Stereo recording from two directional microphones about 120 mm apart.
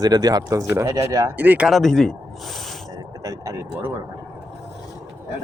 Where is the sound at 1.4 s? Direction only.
10° right (ahead or behind).